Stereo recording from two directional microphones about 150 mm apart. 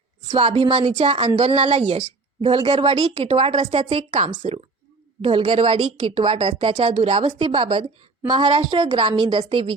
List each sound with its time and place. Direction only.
0.3 s speech: 35° right (ahead or behind)